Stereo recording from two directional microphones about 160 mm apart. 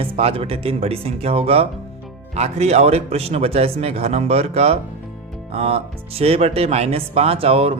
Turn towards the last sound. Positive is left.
turn(degrees=-35)  # may be behind; listen again after turning